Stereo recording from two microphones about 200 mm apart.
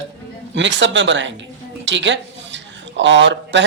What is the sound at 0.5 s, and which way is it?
A woman's voice, 65° right (ahead or behind).